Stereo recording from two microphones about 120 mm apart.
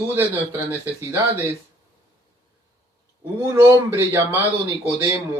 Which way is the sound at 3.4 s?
25° right (ahead or behind).